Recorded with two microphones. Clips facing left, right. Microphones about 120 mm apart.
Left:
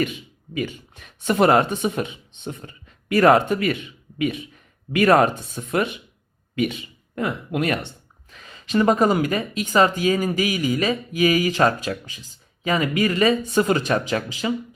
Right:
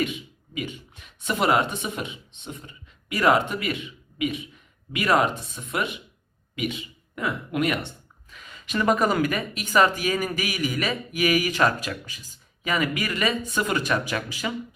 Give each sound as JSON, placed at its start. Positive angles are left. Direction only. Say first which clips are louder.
{"t": 0.5, "sound": "speech", "louder": "left 5 dB", "side_deg": 45}
{"t": 2.5, "sound": "speech", "louder": "left 5 dB", "side_deg": 45}
{"t": 7.2, "sound": "speech", "louder": "left 2 dB", "side_deg": 40}